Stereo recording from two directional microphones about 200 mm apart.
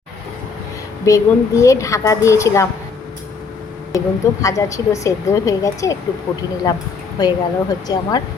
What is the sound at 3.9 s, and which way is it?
A woman's voice, 15° left (ahead or behind).